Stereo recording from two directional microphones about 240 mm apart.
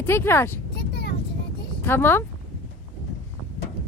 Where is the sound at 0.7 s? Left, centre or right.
Left.